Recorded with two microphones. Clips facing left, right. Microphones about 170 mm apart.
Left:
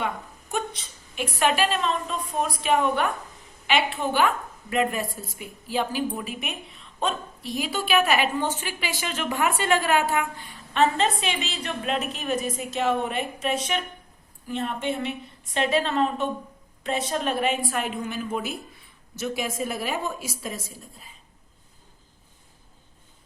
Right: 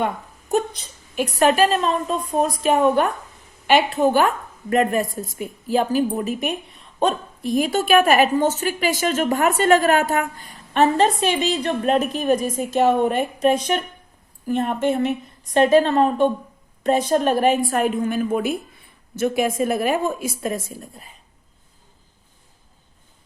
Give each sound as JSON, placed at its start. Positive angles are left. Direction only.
{"t": 0.0, "sound": "a woman's voice", "side_deg": -40}